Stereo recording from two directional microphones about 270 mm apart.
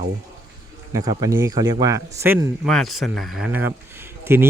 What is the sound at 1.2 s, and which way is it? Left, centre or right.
Speech, centre.